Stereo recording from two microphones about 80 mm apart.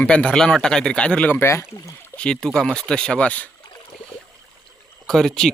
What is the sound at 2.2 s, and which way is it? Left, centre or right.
Speech, centre.